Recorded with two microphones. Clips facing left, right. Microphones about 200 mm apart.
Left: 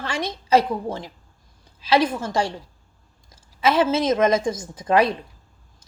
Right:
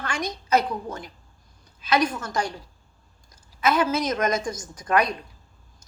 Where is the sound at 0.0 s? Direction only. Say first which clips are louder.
Left 2 dB; 30° left (ahead or behind).